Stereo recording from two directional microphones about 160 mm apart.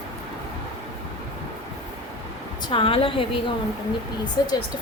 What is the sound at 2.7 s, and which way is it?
Speech, 35° left (ahead or behind).